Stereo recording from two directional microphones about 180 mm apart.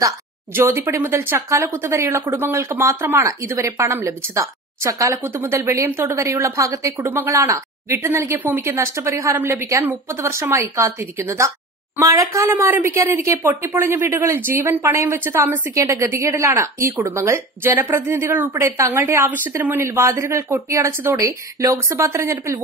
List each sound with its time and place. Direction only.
0.6 s speech: 10° right (ahead or behind)